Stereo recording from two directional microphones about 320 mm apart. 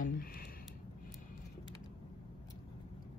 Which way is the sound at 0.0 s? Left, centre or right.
Left.